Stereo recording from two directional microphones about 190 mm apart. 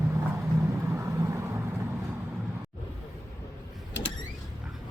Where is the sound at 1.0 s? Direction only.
15° right (ahead or behind).